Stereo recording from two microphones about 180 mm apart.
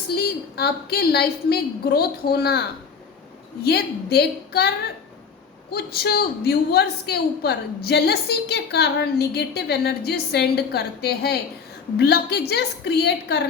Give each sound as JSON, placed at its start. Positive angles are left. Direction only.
{"t": 0.2, "sound": "a woman's voice", "side_deg": 60}
{"t": 5.7, "sound": "a woman's voice", "side_deg": 60}